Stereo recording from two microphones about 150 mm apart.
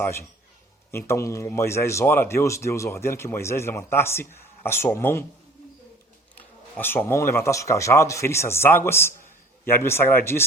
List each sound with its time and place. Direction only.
0.0 s a man's voice: 20° left (ahead or behind)
6.7 s a man's voice: 15° left (ahead or behind)